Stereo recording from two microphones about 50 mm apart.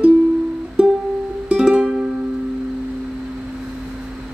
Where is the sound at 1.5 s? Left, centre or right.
Centre.